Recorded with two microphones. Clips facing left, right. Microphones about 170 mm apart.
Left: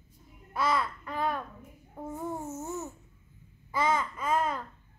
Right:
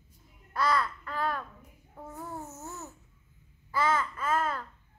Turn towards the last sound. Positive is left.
turn(degrees=15)  # may be behind; listen again after turning